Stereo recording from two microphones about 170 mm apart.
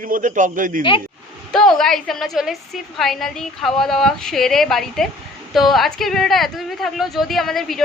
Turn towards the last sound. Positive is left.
turn(degrees=0)  # may be behind; listen again after turning